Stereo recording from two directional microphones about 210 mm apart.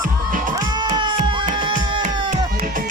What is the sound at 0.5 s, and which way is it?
Music, 20° right (ahead or behind).